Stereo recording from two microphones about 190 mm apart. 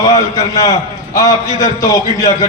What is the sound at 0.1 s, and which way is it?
A man's voice, 20° left (ahead or behind).